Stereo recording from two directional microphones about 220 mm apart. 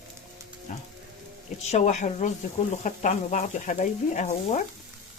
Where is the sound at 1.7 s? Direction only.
30° left (ahead or behind).